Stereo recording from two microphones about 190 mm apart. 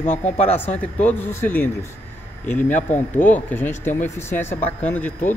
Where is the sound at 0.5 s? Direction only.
10° left (ahead or behind).